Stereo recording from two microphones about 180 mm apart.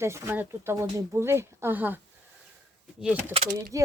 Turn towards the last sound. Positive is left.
turn(degrees=-20)  # may be behind; listen again after turning